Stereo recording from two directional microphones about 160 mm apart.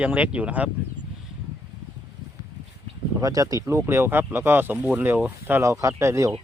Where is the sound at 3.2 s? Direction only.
20° right (ahead or behind).